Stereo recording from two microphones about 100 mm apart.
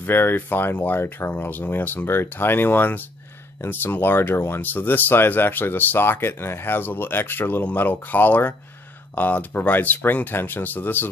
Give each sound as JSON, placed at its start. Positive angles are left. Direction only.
{"t": 0.0, "sound": "speech", "side_deg": 20}